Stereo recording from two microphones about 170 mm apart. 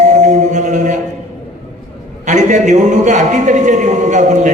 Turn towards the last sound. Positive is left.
turn(degrees=-45)  # may be behind; listen again after turning